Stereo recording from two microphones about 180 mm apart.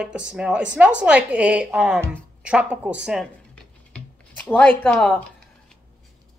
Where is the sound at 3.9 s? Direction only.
5° left (ahead or behind).